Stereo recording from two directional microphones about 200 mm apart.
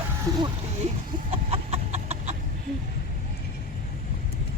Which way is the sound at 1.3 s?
30° right (ahead or behind).